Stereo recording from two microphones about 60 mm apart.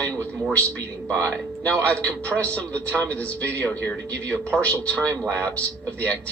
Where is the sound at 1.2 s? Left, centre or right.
Left.